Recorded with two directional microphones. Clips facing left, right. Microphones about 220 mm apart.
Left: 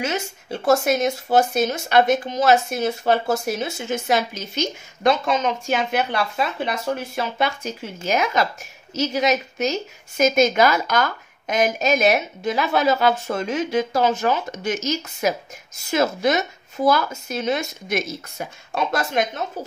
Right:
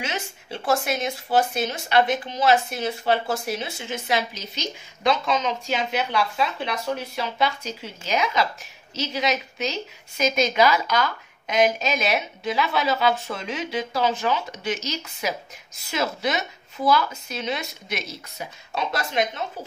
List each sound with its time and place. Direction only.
0.0 s speech: 45° left (ahead or behind)